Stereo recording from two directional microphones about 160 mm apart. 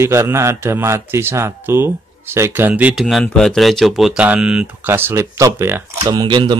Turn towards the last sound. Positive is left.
turn(degrees=-30)  # may be behind; listen again after turning